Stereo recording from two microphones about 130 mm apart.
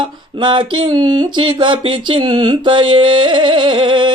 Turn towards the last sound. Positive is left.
turn(degrees=-40)  # may be behind; listen again after turning